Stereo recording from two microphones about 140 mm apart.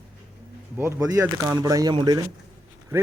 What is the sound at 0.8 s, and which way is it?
Speech, 20° right (ahead or behind).